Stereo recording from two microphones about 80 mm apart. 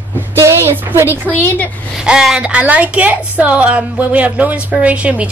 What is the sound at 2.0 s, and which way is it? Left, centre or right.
A woman's voice, centre.